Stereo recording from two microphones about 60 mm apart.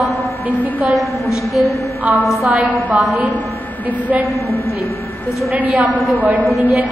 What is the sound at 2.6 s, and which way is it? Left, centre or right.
Speech, right.